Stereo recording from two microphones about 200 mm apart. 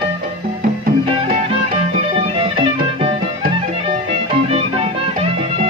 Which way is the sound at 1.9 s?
30° right (ahead or behind).